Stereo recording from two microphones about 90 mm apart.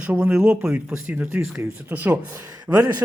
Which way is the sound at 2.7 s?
10° right (ahead or behind).